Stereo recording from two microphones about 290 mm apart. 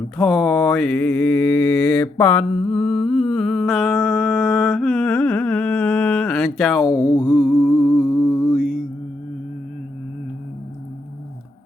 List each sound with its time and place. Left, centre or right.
0.2 s mantra: centre
7.0 s mantra: centre
7.3 s mantra: centre